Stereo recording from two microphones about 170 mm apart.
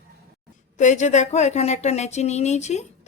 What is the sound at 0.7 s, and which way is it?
A woman's voice, 45° left (ahead or behind).